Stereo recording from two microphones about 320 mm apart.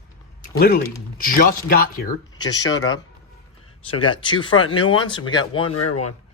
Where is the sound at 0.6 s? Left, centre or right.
Left.